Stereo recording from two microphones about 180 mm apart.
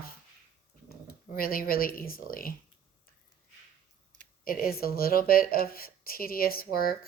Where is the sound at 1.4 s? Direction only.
55° left (ahead or behind).